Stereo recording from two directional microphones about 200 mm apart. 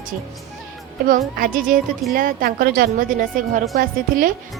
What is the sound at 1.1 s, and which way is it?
A woman's voice, 45° right (ahead or behind).